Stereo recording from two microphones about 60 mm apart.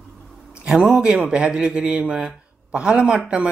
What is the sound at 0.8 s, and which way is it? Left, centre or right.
A man's voice, centre.